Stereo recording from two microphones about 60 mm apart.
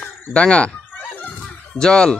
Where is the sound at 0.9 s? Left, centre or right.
Left.